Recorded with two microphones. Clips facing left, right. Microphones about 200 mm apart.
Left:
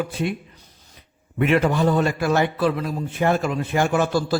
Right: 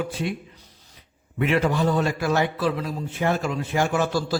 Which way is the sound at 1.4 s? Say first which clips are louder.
Left 3 dB; 55° left (ahead or behind).